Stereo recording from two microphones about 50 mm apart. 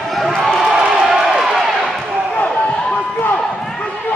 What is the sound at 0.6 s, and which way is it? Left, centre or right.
Run, centre.